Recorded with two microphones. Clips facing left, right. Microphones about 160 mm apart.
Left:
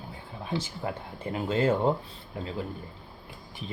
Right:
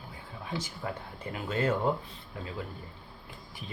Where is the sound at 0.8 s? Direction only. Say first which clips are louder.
Left 4 dB; 25° left (ahead or behind).